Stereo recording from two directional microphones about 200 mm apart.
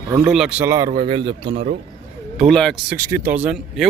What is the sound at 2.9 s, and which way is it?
Speech, 15° right (ahead or behind).